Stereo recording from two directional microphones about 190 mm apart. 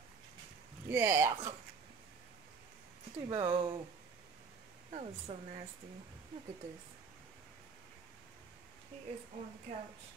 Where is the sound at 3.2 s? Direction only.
25° right (ahead or behind).